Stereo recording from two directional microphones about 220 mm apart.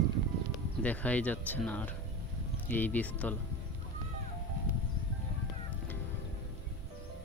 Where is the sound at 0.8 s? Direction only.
5° left (ahead or behind).